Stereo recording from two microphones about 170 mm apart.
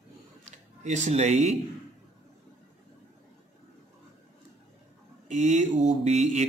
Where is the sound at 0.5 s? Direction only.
45° right (ahead or behind).